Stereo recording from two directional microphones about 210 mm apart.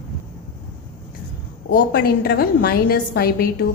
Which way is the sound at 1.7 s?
50° left (ahead or behind).